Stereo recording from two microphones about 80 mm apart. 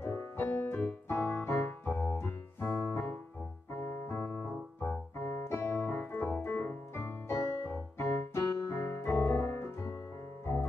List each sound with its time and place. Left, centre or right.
0.0 s music: left
3.7 s keyboard: left
8.0 s piano: left